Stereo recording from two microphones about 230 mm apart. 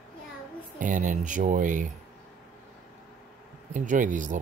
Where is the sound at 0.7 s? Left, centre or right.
Right.